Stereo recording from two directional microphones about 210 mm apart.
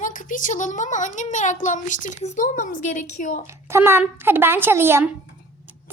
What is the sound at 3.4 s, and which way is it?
A woman's voice, 10° right (ahead or behind).